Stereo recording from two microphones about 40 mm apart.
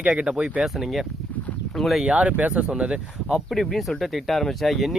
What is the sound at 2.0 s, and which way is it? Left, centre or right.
Speech, right.